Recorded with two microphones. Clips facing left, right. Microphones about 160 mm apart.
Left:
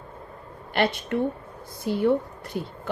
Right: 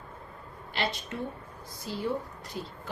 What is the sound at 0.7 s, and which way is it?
Speech, 60° left (ahead or behind).